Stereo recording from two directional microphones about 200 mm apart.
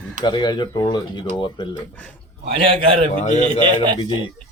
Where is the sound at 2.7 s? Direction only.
25° right (ahead or behind).